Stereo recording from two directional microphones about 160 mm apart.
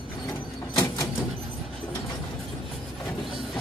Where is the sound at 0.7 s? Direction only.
25° left (ahead or behind).